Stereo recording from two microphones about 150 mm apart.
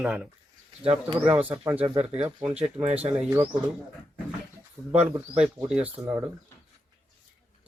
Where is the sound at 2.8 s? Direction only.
45° right (ahead or behind).